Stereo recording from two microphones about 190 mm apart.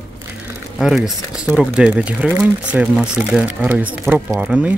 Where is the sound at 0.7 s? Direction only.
Centre (ahead or behind).